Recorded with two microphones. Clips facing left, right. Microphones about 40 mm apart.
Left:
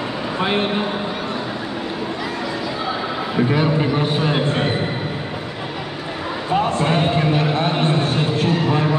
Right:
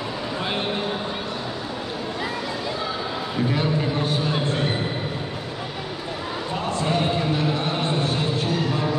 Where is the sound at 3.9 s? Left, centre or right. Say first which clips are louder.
Left 5 dB; left.